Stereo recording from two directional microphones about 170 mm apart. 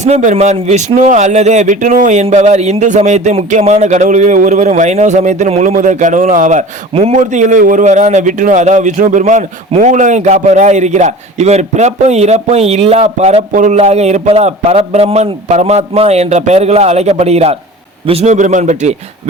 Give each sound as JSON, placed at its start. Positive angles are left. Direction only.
{"t": 0.0, "sound": "a man's voice", "side_deg": -45}